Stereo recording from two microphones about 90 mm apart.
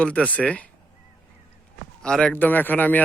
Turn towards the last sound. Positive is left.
turn(degrees=20)  # may be behind; listen again after turning